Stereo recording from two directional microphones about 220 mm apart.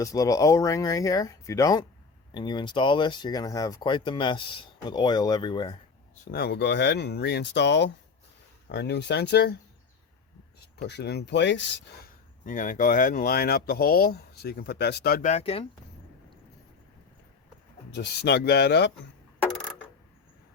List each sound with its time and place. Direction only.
0.0 s speech: 15° left (ahead or behind)
6.3 s speech: 50° left (ahead or behind)
10.6 s speech: 45° left (ahead or behind)
12.5 s speech: 35° left (ahead or behind)
17.9 s speech: 50° left (ahead or behind)